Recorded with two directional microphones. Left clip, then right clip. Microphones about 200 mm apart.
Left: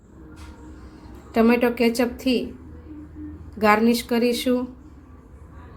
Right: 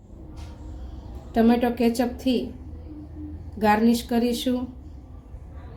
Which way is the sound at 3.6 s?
10° left (ahead or behind).